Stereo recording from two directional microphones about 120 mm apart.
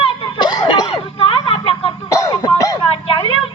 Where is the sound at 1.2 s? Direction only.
50° left (ahead or behind).